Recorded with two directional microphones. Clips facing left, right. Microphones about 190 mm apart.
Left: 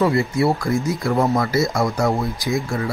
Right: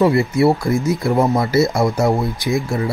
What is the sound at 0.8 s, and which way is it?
Speech, 20° right (ahead or behind).